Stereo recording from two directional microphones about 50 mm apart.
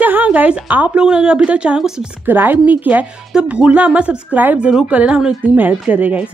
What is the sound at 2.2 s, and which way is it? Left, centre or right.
Speech, right.